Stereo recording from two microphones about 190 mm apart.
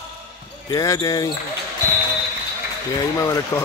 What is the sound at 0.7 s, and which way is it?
Speech, 20° left (ahead or behind).